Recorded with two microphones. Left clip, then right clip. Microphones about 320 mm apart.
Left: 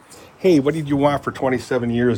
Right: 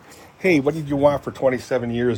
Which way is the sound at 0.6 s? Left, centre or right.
Centre.